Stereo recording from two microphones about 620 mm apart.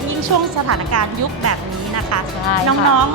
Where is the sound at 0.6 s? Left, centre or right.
Right.